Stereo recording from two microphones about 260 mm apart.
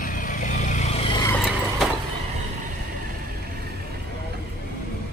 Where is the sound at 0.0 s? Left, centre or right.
Left.